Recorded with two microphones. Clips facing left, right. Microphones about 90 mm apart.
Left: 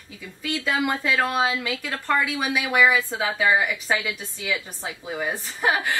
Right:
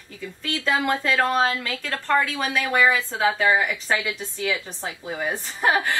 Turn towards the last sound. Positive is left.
turn(degrees=0)  # may be behind; listen again after turning